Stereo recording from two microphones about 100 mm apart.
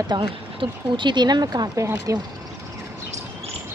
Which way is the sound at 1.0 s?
50° right (ahead or behind).